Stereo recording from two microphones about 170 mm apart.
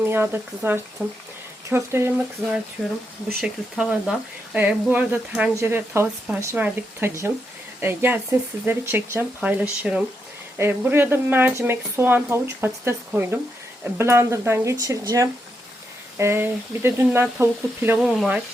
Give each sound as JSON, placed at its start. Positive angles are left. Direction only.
{"t": 0.0, "sound": "speech", "side_deg": -10}